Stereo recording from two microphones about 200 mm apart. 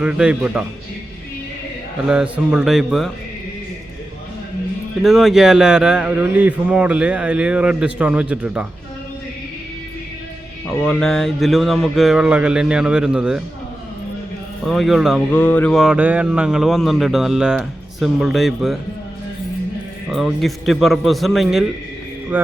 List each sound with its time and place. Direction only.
0.0 s speech: 5° right (ahead or behind)
2.0 s speech: 5° right (ahead or behind)
5.0 s speech: centre (ahead or behind)
10.7 s speech: 5° left (ahead or behind)
14.7 s speech: centre (ahead or behind)
15.3 s speech: 10° left (ahead or behind)
20.1 s speech: centre (ahead or behind)